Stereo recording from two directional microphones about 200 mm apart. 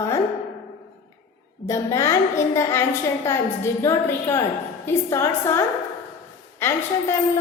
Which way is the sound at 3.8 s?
15° left (ahead or behind).